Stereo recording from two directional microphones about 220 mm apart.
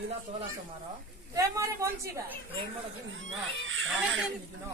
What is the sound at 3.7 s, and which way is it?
Speech, 60° right (ahead or behind).